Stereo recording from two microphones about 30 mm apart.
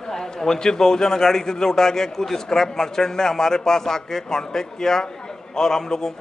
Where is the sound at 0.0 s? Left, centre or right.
Centre.